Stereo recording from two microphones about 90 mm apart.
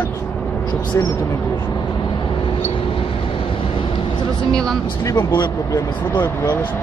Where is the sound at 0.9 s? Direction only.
35° left (ahead or behind).